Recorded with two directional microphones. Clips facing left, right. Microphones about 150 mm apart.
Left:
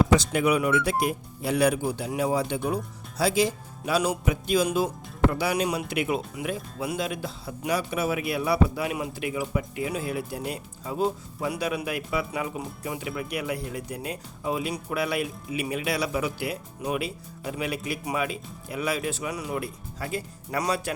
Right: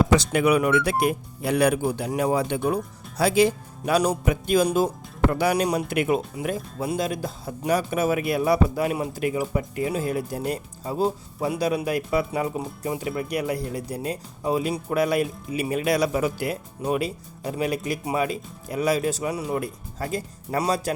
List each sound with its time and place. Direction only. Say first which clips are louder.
0.2 s speech: right 3 dB; 65° right (ahead or behind); by 4.1 s 50° right (ahead or behind)
4.3 s music: right 3 dB; 50° right (ahead or behind)
5.5 s speech: right 3 dB; 40° right (ahead or behind)
5.9 s music: right 4 dB; 50° right (ahead or behind)
6.3 s speech: right 3 dB; 40° right (ahead or behind)
19.5 s speech: right 4 dB; 40° right (ahead or behind)